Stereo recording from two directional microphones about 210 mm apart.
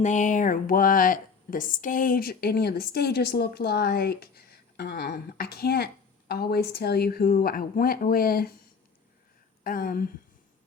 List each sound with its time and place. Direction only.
0.0 s speech: 35° left (ahead or behind)
9.6 s speech: 45° left (ahead or behind)